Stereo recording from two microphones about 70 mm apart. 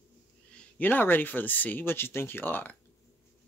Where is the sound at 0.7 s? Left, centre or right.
Left.